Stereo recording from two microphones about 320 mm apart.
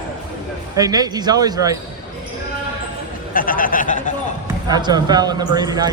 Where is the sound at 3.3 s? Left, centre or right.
Left.